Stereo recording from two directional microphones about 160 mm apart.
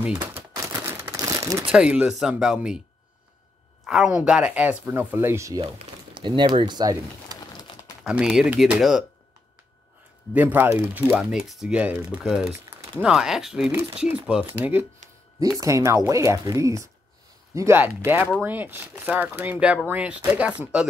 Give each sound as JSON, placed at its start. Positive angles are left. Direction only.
{"t": 0.0, "sound": "speech", "side_deg": -15}
{"t": 0.8, "sound": "crumpling", "side_deg": -20}
{"t": 1.7, "sound": "speech", "side_deg": -5}
{"t": 3.8, "sound": "speech", "side_deg": -5}
{"t": 6.1, "sound": "speech", "side_deg": -30}
{"t": 7.3, "sound": "bird", "side_deg": 25}
{"t": 8.0, "sound": "speech", "side_deg": -5}
{"t": 10.3, "sound": "speech", "side_deg": -10}